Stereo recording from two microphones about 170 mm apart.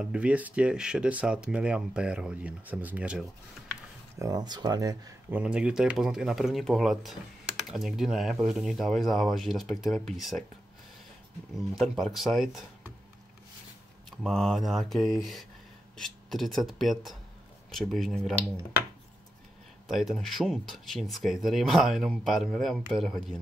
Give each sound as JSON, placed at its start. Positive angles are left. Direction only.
{"t": 0.0, "sound": "speech", "side_deg": -5}
{"t": 4.2, "sound": "speech", "side_deg": -25}
{"t": 5.3, "sound": "speech", "side_deg": -5}
{"t": 11.7, "sound": "speech", "side_deg": 0}
{"t": 14.1, "sound": "speech", "side_deg": 5}
{"t": 19.9, "sound": "speech", "side_deg": 0}